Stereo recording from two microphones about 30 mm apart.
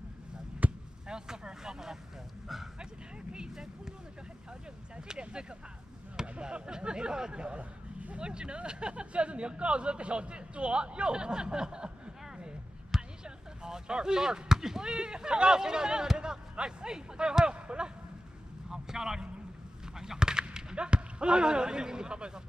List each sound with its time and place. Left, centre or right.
0.6 s basketball bounce: right
1.0 s speech: right
3.3 s speech: right
4.9 s speech: right
6.4 s a man's voice: right
13.2 s speech: right
18.7 s speech: centre
20.0 s a sound: right
20.7 s speech: right